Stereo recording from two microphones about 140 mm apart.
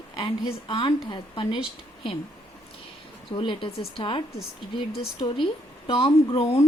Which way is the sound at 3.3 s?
40° left (ahead or behind).